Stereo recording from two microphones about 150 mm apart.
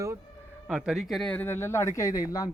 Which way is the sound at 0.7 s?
5° right (ahead or behind).